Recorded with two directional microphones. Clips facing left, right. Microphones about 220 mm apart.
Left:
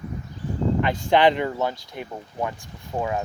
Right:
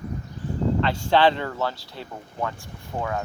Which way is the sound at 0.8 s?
15° left (ahead or behind).